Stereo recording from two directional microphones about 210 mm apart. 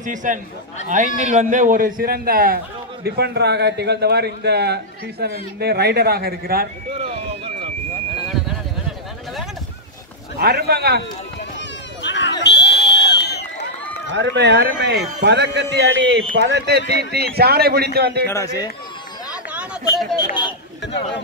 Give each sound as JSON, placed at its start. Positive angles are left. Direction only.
{"t": 0.0, "sound": "a man's voice", "side_deg": -35}
{"t": 6.9, "sound": "a sound", "side_deg": -25}
{"t": 10.4, "sound": "a man's voice", "side_deg": -50}
{"t": 12.0, "sound": "a sound", "side_deg": 60}
{"t": 14.1, "sound": "a man's voice", "side_deg": -55}
{"t": 18.2, "sound": "speech", "side_deg": 15}
{"t": 20.2, "sound": "speech", "side_deg": 20}